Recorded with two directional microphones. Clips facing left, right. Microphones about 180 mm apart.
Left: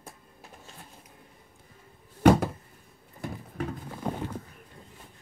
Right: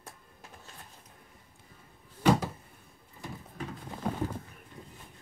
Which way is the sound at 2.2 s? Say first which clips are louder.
Left 6 dB; 55° left (ahead or behind).